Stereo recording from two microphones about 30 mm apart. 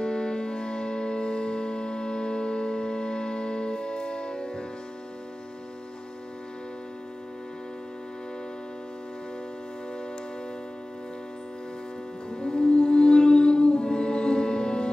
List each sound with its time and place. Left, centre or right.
0.0 s music: left
12.3 s music: left